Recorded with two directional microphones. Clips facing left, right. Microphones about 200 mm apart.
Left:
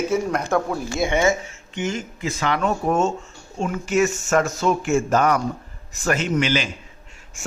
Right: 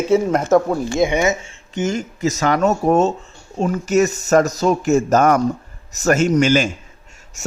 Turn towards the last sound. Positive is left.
turn(degrees=-40)  # may be behind; listen again after turning